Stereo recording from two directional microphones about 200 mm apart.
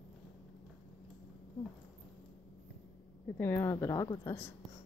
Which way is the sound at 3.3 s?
10° left (ahead or behind).